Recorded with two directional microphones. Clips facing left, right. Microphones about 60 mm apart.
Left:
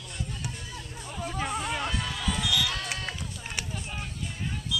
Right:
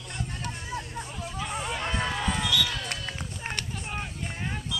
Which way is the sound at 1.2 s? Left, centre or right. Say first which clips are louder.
Left 5 dB; left.